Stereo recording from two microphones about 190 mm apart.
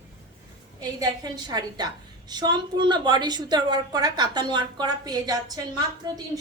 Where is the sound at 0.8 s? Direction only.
20° right (ahead or behind).